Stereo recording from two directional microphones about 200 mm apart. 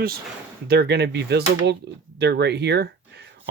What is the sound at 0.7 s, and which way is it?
Speech, 55° right (ahead or behind).